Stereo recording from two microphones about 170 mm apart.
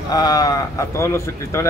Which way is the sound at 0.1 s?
20° left (ahead or behind).